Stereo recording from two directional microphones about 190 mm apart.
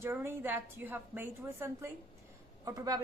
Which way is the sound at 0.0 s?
15° right (ahead or behind).